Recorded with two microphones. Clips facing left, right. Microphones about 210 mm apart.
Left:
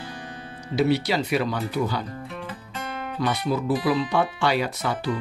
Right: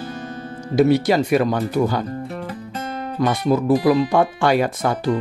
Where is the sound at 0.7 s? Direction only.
50° right (ahead or behind).